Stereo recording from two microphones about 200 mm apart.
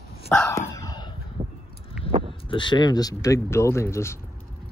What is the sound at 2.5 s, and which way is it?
Speech, 25° left (ahead or behind).